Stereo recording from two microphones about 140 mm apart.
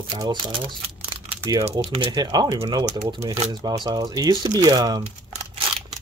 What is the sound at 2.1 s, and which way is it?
Speech, 30° right (ahead or behind).